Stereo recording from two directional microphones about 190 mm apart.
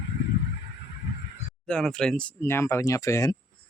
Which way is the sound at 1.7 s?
5° left (ahead or behind).